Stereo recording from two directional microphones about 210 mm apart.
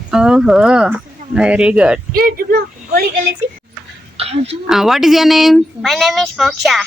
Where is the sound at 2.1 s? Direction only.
45° right (ahead or behind).